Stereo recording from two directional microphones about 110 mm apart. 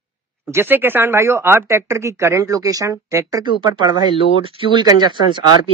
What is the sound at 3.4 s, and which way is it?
Speech, 40° right (ahead or behind).